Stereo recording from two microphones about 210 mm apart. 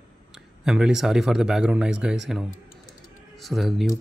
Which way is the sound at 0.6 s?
5° right (ahead or behind).